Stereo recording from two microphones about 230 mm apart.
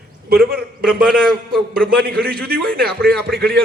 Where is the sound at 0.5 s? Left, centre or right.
Right.